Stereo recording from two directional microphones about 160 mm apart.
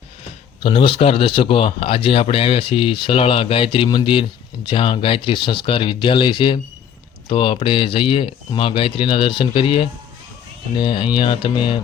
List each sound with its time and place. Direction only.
0.6 s a man's voice: 35° left (ahead or behind)